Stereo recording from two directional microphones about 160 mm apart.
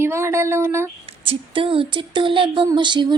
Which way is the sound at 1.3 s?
35° right (ahead or behind).